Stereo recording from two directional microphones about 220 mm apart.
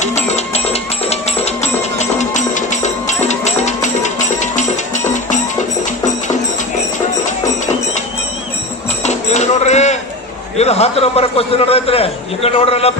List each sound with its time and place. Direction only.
0.0 s music: 30° left (ahead or behind)
9.0 s dishes: 30° left (ahead or behind)
10.6 s a man's voice: 30° left (ahead or behind)